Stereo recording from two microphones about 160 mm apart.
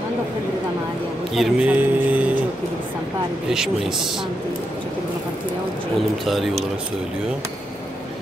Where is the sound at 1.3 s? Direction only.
5° right (ahead or behind).